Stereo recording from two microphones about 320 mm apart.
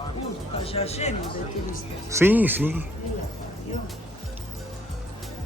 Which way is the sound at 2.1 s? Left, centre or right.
Centre.